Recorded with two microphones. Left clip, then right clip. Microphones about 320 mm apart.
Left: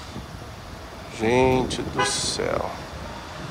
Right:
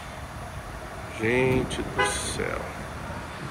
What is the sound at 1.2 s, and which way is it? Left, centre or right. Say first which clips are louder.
Speech: left 4 dB; centre.